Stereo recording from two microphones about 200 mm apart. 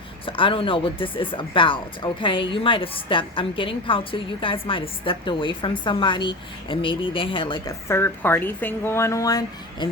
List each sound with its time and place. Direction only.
0.3 s speech: 25° left (ahead or behind)